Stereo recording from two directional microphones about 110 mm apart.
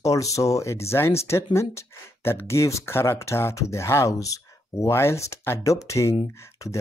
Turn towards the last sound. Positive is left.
turn(degrees=25)  # may be behind; listen again after turning